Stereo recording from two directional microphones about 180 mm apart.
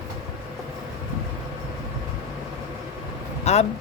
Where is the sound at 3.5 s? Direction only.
35° left (ahead or behind).